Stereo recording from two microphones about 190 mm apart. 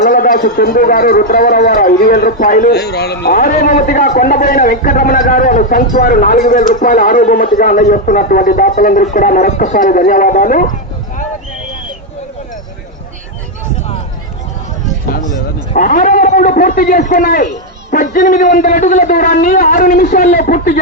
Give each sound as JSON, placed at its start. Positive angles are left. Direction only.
{"t": 0.0, "sound": "a man's voice", "side_deg": 45}
{"t": 15.7, "sound": "a man's voice", "side_deg": 45}